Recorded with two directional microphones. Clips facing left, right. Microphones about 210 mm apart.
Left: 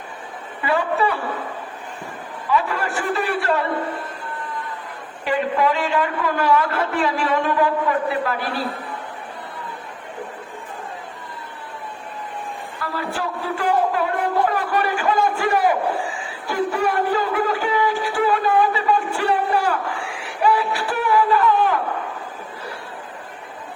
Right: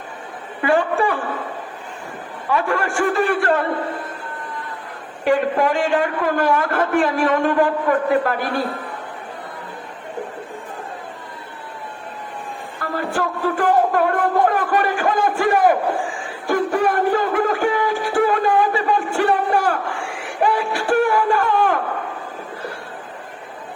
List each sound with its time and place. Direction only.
0.6 s a sound: 50° right (ahead or behind)
2.5 s a man's voice: 50° right (ahead or behind)
5.2 s a man's voice: 45° right (ahead or behind)
12.8 s shofar: 50° right (ahead or behind)
16.2 s music: 50° right (ahead or behind)
20.2 s a sound: 45° right (ahead or behind)